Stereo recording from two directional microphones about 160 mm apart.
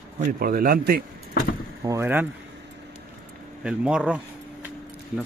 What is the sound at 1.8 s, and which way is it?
Speech, 15° right (ahead or behind).